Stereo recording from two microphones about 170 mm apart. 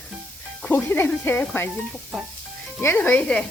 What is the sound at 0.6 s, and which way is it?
Speech, 10° left (ahead or behind).